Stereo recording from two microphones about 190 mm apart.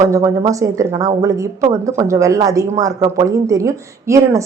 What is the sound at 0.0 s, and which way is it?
A woman's voice, 15° right (ahead or behind).